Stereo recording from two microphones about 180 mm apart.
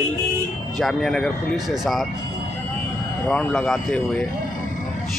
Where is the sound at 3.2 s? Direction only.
10° left (ahead or behind).